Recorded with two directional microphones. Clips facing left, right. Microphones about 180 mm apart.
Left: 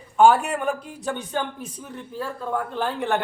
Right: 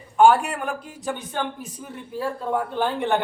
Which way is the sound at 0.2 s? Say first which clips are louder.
Even; centre (ahead or behind).